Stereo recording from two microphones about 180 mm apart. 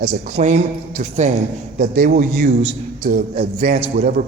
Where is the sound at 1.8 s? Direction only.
50° right (ahead or behind).